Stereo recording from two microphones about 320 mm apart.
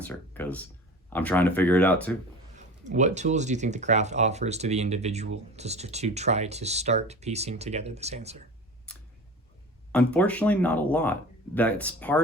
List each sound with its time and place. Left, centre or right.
0.0 s speech: centre
2.6 s speech: right
8.9 s clicking: centre
9.9 s speech: centre